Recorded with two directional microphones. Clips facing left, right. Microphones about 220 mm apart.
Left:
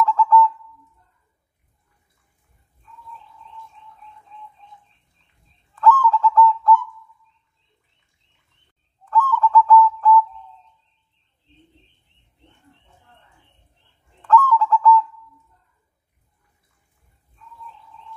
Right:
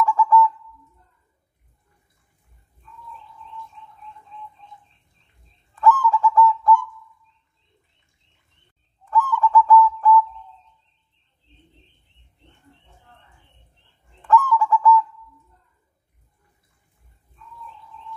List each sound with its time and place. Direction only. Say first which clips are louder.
0.0 s bird: left 1 dB; 15° right (ahead or behind)
5.8 s bird: left 1 dB; 15° right (ahead or behind)
9.1 s bird: left 1 dB; 15° right (ahead or behind)
14.2 s bird: left 1 dB; 15° right (ahead or behind)